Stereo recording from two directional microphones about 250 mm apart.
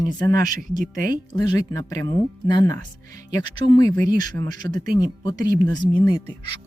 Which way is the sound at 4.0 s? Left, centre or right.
Right.